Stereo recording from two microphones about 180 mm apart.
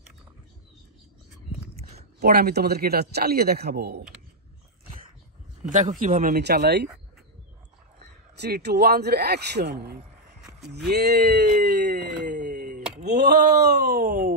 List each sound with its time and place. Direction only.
1.8 s a sound: 35° right (ahead or behind)
2.1 s a man's voice: 60° right (ahead or behind)
5.6 s speech: 45° right (ahead or behind); by 6.9 s 70° right (ahead or behind)
8.4 s a man's voice: 65° right (ahead or behind)
12.3 s a sound: 45° right (ahead or behind)
13.0 s a man's voice: 65° right (ahead or behind)